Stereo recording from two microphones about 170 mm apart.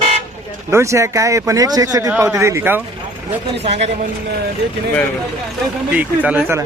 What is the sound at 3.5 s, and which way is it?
Speech, 40° right (ahead or behind).